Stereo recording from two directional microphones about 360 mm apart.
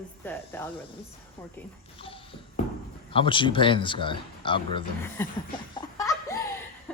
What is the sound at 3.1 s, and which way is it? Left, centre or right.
Speech, centre.